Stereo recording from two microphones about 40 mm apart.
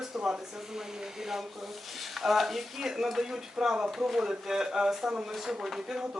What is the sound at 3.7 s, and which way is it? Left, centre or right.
Speech, right.